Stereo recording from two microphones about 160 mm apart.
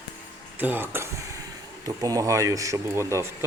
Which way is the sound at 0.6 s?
10° right (ahead or behind).